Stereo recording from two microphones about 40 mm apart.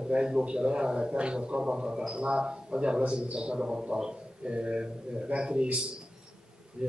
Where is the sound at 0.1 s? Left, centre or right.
Right.